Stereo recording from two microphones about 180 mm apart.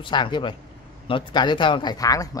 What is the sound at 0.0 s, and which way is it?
A man's voice, 25° left (ahead or behind).